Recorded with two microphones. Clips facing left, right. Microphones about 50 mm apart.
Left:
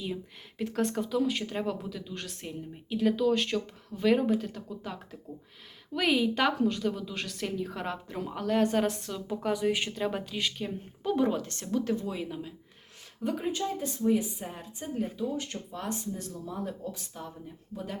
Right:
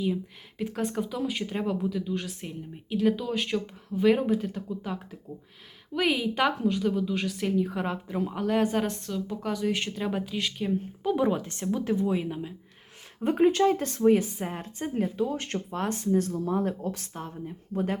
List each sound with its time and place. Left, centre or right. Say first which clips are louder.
0.6 s speech: even; centre
13.4 s speech: right 10 dB; right